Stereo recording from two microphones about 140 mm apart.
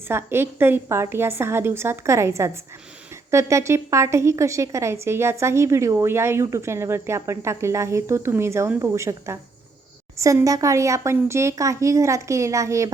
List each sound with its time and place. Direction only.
0.1 s a woman's voice: 15° right (ahead or behind)